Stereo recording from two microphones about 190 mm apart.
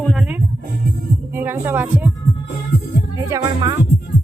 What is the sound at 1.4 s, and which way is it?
Speech, 10° right (ahead or behind).